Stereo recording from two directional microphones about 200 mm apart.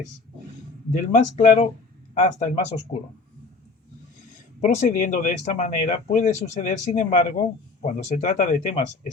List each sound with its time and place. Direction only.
0.9 s speech: 35° left (ahead or behind)
4.6 s speech: 40° left (ahead or behind)